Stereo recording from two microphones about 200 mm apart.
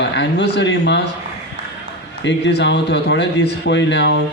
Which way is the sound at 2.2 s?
60° left (ahead or behind).